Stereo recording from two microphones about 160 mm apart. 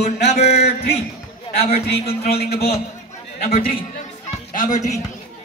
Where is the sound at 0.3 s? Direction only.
45° left (ahead or behind).